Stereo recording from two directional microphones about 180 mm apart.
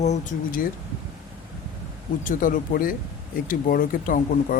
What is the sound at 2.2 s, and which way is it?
Speech, 50° left (ahead or behind).